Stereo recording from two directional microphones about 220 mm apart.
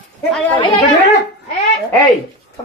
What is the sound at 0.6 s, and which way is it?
Speech, 25° left (ahead or behind).